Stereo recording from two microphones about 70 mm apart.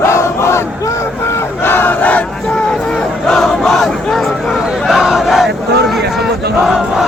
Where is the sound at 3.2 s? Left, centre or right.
Centre.